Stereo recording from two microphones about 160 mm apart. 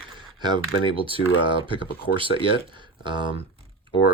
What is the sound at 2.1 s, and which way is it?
Speech, 60° left (ahead or behind).